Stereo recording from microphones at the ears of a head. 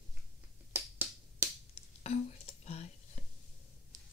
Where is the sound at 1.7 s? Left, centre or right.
Left.